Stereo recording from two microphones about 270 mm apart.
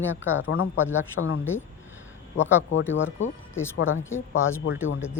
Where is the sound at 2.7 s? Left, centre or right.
Left.